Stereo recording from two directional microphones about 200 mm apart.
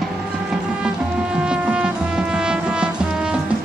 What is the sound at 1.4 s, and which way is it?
Music, 5° right (ahead or behind).